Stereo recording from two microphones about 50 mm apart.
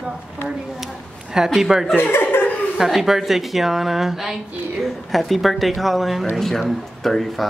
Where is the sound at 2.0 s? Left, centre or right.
Left.